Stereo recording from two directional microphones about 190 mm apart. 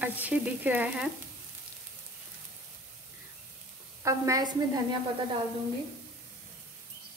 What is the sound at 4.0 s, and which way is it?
Frying, 15° right (ahead or behind).